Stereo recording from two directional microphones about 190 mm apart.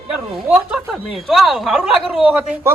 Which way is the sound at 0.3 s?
5° right (ahead or behind).